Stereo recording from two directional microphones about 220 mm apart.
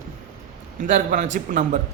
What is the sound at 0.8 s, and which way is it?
Speech, 35° right (ahead or behind).